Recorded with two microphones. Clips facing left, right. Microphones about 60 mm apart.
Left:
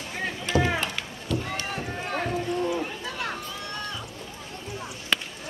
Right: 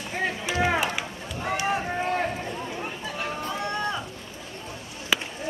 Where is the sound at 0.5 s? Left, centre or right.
Left.